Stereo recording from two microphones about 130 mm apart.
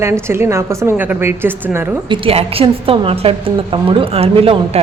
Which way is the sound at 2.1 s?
45° right (ahead or behind).